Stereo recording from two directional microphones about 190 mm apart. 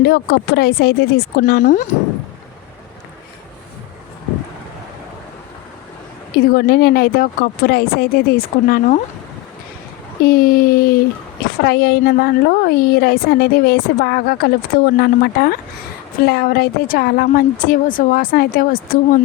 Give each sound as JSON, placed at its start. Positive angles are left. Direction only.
{"t": 0.0, "sound": "a woman's voice", "side_deg": 55}
{"t": 1.2, "sound": "a woman's voice", "side_deg": 65}
{"t": 6.4, "sound": "a woman's voice", "side_deg": 50}
{"t": 10.2, "sound": "a woman's voice", "side_deg": 50}